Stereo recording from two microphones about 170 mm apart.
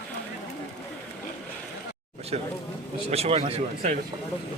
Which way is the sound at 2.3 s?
40° right (ahead or behind).